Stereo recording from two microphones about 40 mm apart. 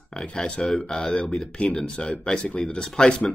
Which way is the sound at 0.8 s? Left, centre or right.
Centre.